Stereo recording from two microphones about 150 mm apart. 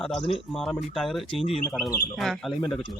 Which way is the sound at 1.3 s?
40° left (ahead or behind).